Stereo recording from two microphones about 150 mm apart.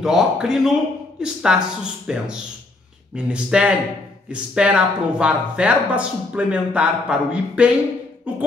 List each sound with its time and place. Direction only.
0.0 s speech: 5° right (ahead or behind)